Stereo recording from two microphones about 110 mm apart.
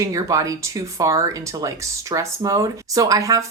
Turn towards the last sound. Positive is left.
turn(degrees=-30)  # may be behind; listen again after turning